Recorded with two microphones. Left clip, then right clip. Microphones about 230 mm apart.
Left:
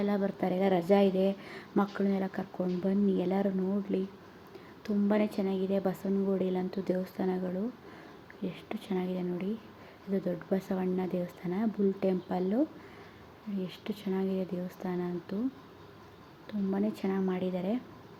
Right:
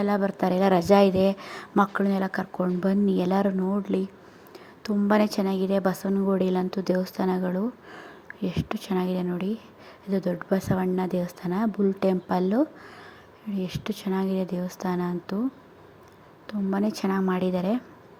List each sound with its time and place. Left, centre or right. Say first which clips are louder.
0.0 s speech: right 7 dB; centre
5.0 s a woman's voice: right 7 dB; centre
16.5 s speech: right 5 dB; centre